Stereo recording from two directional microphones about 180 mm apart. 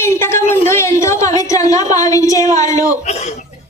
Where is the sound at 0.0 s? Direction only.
15° left (ahead or behind).